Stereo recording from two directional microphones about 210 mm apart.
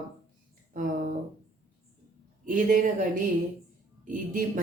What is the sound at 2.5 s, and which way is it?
Speech, 40° right (ahead or behind).